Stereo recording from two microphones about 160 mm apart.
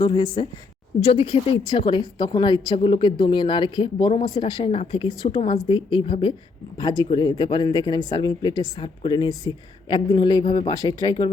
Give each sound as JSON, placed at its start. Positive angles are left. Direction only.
{"t": 0.0, "sound": "a woman's voice", "side_deg": 30}